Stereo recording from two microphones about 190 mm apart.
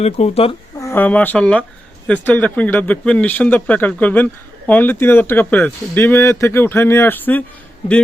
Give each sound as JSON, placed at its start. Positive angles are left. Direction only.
{"t": 0.0, "sound": "speech", "side_deg": 35}
{"t": 0.8, "sound": "speech", "side_deg": 10}